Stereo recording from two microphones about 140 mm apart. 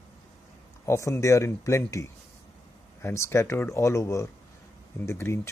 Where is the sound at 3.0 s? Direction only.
20° left (ahead or behind).